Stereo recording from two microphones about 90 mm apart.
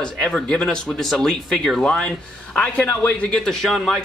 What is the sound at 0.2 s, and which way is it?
Speech, 5° left (ahead or behind).